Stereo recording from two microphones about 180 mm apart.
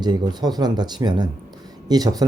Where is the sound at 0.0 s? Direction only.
25° right (ahead or behind).